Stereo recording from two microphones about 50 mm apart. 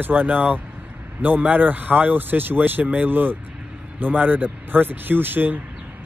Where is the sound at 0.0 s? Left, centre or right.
Right.